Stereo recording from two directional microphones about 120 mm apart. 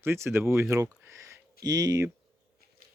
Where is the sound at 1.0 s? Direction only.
25° right (ahead or behind).